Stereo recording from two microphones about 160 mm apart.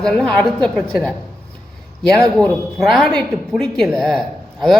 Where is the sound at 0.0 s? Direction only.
5° left (ahead or behind).